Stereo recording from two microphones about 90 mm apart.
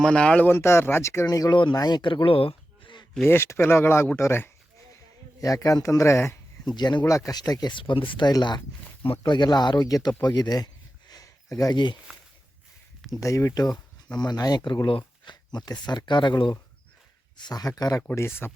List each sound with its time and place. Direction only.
0.0 s speech: 10° left (ahead or behind)
0.4 s speech: 25° left (ahead or behind)
1.7 s speech: 50° left (ahead or behind)
3.2 s speech: 30° left (ahead or behind)
5.4 s speech: 40° left (ahead or behind)
6.7 s speech: 50° left (ahead or behind); by 8.3 s 70° left (ahead or behind)
8.3 s speech: 50° left (ahead or behind)
11.1 s a sound: 40° left (ahead or behind)
11.7 s speech: 55° left (ahead or behind)
13.1 s speech: 35° left (ahead or behind)
18.1 s speech: 30° left (ahead or behind)